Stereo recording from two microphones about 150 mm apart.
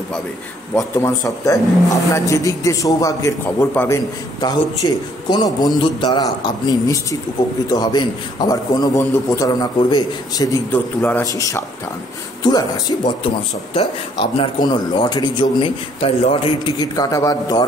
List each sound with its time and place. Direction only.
0.7 s a man's voice: 20° left (ahead or behind)
4.4 s a man's voice: 30° left (ahead or behind)
10.7 s a man's voice: 10° left (ahead or behind); by 13.3 s 30° left (ahead or behind)
14.4 s a man's voice: 30° left (ahead or behind)
16.7 s a man's voice: 25° left (ahead or behind)